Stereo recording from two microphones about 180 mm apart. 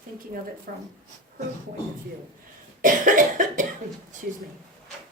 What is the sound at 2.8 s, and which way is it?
Speech, 45° right (ahead or behind).